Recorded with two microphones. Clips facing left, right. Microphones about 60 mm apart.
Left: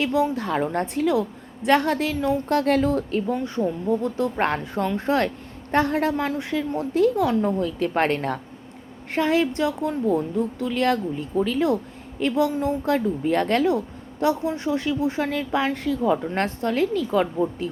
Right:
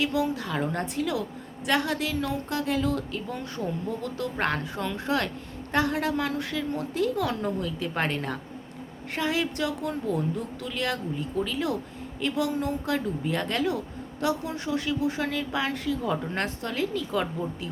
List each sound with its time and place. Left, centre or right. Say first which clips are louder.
0.0 s speech: left 4 dB; left
2.5 s a woman's voice: left 9 dB; left
2.8 s a woman's voice: left 6 dB; left